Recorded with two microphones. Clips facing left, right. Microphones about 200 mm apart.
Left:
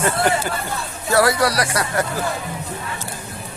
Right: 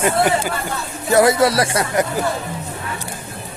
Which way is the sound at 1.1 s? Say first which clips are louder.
Right 4 dB; 20° right (ahead or behind).